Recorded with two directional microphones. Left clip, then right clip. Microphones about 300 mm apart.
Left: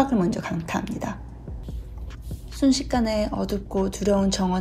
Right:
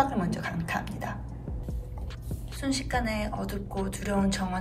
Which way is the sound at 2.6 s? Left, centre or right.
Centre.